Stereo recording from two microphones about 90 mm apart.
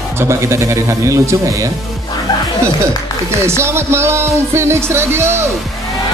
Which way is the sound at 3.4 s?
30° right (ahead or behind).